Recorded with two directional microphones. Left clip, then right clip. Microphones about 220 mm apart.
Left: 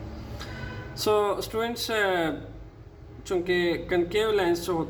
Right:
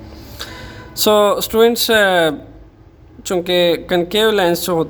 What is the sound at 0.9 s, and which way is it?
Speech, 50° right (ahead or behind).